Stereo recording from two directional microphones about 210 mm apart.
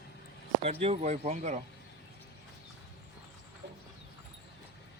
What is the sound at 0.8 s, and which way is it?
Speech, 30° right (ahead or behind).